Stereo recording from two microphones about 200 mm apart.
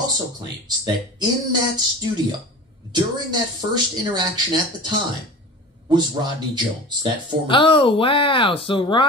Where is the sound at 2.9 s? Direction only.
20° right (ahead or behind).